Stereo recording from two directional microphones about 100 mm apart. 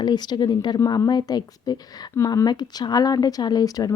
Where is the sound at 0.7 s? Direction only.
35° left (ahead or behind).